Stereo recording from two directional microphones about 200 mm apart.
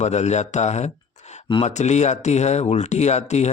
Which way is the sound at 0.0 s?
35° left (ahead or behind).